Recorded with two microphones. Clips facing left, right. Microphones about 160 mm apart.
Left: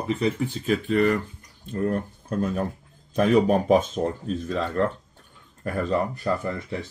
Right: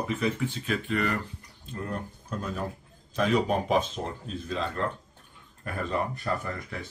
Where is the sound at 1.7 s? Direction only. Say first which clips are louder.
Left 9 dB; 55° left (ahead or behind).